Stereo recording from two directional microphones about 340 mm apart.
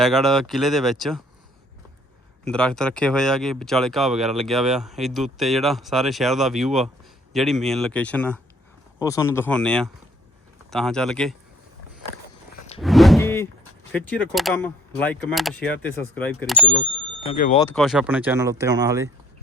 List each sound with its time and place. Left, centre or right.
0.0 s speech: centre
2.5 s speech: centre
12.8 s a sound: centre
13.9 s speech: centre
17.2 s speech: left
17.6 s speech: centre